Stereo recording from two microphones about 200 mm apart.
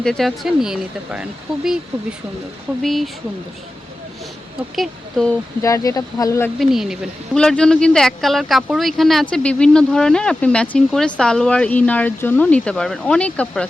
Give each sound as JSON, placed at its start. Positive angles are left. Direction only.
{"t": 0.0, "sound": "speech", "side_deg": 0}
{"t": 2.8, "sound": "speech", "side_deg": 0}
{"t": 4.7, "sound": "speech", "side_deg": 0}
{"t": 5.6, "sound": "speech", "side_deg": 15}
{"t": 6.6, "sound": "speech", "side_deg": 0}